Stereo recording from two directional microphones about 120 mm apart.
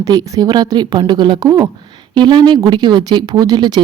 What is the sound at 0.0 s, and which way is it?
A woman's voice, 30° right (ahead or behind).